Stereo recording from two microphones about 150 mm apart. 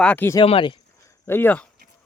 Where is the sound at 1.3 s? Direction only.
15° left (ahead or behind).